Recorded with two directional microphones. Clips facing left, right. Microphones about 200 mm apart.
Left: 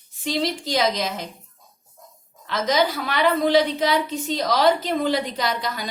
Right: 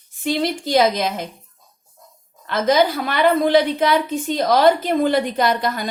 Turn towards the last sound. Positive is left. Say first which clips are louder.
# right 6 dB
turn(degrees=-55)  # may be behind; listen again after turning